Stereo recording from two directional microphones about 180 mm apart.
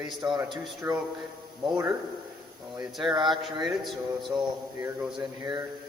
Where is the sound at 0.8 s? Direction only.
10° right (ahead or behind).